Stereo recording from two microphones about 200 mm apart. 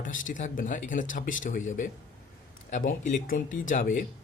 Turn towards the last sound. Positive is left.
turn(degrees=40)  # may be behind; listen again after turning